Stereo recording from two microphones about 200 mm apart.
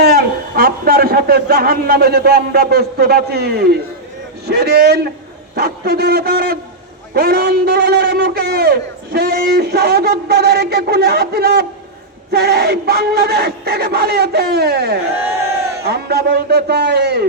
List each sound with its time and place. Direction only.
0.0 s a man's voice: 50° right (ahead or behind)